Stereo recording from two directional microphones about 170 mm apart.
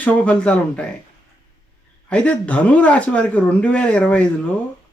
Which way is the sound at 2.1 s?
5° left (ahead or behind).